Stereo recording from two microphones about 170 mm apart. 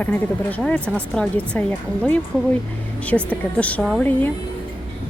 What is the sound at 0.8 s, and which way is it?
Speech, 10° right (ahead or behind).